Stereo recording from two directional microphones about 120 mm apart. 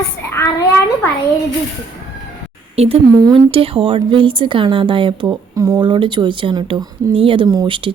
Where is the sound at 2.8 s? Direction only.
55° right (ahead or behind); by 5.8 s 25° right (ahead or behind).